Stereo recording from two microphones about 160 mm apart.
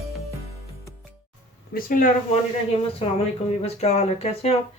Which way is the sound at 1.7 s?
60° left (ahead or behind).